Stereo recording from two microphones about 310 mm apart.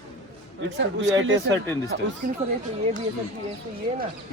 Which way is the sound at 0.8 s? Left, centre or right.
Right.